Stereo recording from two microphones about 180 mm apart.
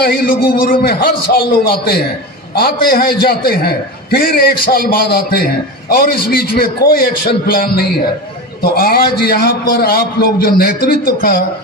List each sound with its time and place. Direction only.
0.0 s a man's voice: 60° left (ahead or behind)